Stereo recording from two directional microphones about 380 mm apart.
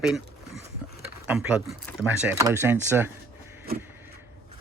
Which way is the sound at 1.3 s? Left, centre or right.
Centre.